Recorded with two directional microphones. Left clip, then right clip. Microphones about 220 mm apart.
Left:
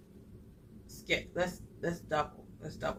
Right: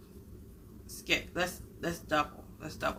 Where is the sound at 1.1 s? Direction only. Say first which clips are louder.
Right 1 dB; 15° right (ahead or behind).